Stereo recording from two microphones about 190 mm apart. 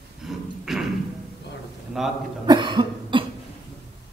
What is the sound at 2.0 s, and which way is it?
Speech, centre (ahead or behind).